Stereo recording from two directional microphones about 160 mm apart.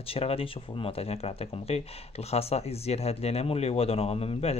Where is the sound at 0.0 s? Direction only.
35° left (ahead or behind).